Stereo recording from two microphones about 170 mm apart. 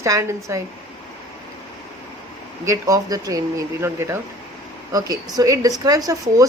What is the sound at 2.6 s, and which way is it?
Speech, 20° right (ahead or behind).